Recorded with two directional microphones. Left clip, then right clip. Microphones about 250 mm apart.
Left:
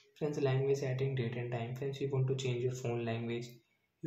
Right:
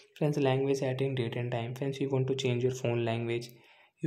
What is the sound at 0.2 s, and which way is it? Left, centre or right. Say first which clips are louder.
Speech: right 5 dB; right.